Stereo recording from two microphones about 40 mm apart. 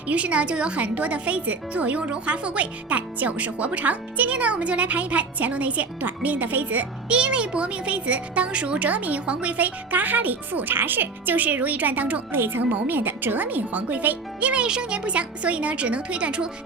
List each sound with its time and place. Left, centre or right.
0.1 s speech: right
7.1 s speech: right
8.9 s speech: right
12.3 s speech: right
12.7 s speech: right
14.5 s speech: right